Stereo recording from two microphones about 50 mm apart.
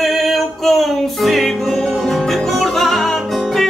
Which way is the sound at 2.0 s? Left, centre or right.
Centre.